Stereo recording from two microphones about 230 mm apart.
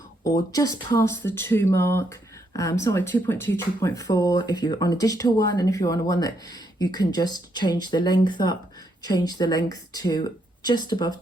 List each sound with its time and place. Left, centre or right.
0.3 s speech: centre